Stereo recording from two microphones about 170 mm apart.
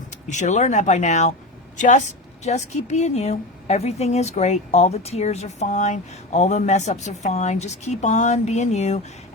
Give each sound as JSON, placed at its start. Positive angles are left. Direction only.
{"t": 0.3, "sound": "a woman's voice", "side_deg": 45}